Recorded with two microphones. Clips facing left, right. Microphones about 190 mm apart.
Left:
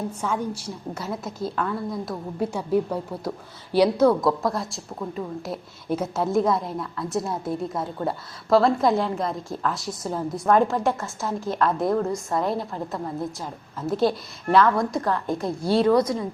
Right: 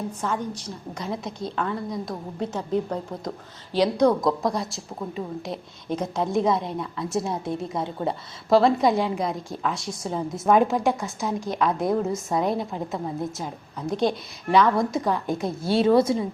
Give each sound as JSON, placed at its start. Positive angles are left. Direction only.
{"t": 0.1, "sound": "a woman's voice", "side_deg": 10}
{"t": 15.7, "sound": "speech", "side_deg": -25}